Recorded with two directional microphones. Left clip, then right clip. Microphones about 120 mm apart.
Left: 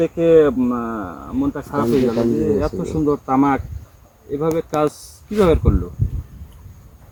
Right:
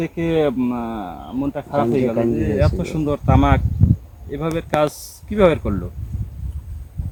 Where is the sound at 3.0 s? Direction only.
35° right (ahead or behind).